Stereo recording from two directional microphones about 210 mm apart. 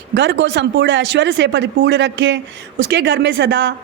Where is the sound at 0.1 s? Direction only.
55° right (ahead or behind).